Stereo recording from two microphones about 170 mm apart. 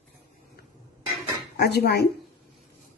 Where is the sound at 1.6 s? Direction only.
70° left (ahead or behind).